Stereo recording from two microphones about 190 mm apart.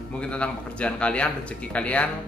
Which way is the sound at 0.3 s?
5° left (ahead or behind).